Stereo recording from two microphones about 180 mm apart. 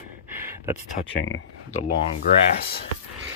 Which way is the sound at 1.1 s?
90° left.